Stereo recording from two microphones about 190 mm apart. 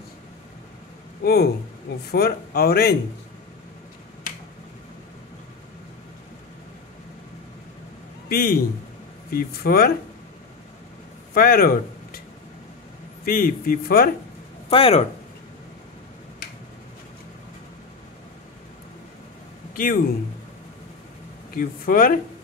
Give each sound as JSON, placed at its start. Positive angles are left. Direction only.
{"t": 1.2, "sound": "a man's voice", "side_deg": 55}
{"t": 8.3, "sound": "a man's voice", "side_deg": 55}
{"t": 11.3, "sound": "speech", "side_deg": 50}
{"t": 13.2, "sound": "speech", "side_deg": 50}
{"t": 14.7, "sound": "speech", "side_deg": 30}
{"t": 19.7, "sound": "speech", "side_deg": 50}
{"t": 21.5, "sound": "speech", "side_deg": 50}